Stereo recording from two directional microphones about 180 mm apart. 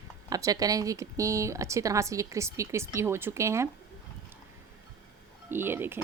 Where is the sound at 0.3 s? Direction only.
20° right (ahead or behind).